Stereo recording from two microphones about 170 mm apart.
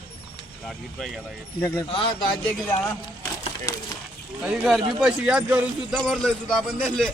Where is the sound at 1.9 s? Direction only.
30° left (ahead or behind).